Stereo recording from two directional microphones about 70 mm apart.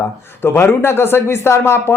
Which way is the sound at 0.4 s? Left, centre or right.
Left.